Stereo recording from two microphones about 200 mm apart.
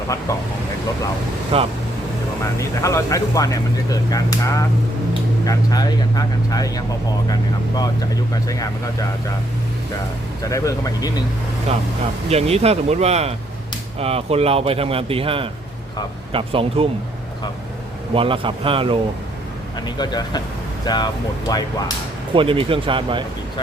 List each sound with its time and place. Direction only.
1.5 s a man's voice: 25° right (ahead or behind)
2.6 s speech: 15° left (ahead or behind)
10.5 s speech: 15° left (ahead or behind)
12.3 s a man's voice: 30° right (ahead or behind)
18.1 s a man's voice: 25° right (ahead or behind)
20.0 s speech: 20° left (ahead or behind)
22.4 s a man's voice: 25° right (ahead or behind)